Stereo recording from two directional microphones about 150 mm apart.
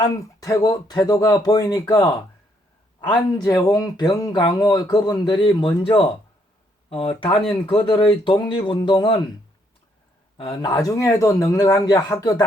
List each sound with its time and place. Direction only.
0.0 s speech: 20° left (ahead or behind)
10.3 s speech: 30° left (ahead or behind)